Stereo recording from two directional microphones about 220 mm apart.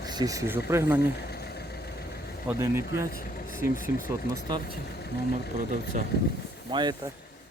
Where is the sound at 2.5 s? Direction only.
10° right (ahead or behind).